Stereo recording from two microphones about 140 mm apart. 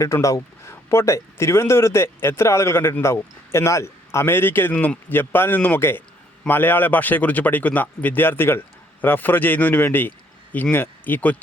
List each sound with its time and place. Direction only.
0.0 s a man's voice: 20° left (ahead or behind)